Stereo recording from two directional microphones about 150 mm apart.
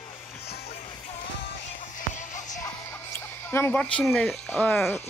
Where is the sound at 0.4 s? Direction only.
90° left.